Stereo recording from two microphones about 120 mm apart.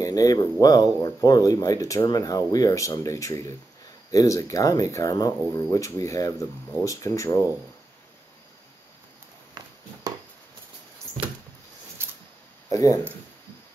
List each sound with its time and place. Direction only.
0.0 s speech: 30° left (ahead or behind)
12.0 s a sound: 20° right (ahead or behind)
12.6 s speech: 25° left (ahead or behind)